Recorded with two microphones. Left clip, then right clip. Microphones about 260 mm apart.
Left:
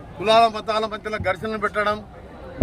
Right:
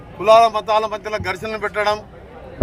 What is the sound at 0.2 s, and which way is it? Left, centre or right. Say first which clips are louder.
A man's voice: right 5 dB; centre.